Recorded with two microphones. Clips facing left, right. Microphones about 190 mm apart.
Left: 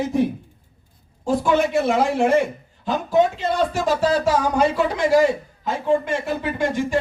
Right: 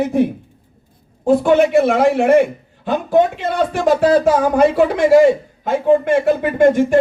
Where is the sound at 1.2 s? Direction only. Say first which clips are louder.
Right 7 dB; 60° right (ahead or behind).